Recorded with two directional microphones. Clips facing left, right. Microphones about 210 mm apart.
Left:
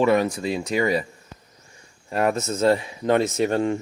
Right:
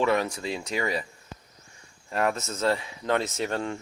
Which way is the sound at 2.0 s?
15° left (ahead or behind).